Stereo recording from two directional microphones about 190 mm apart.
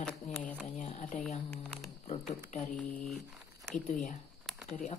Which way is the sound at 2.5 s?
40° left (ahead or behind).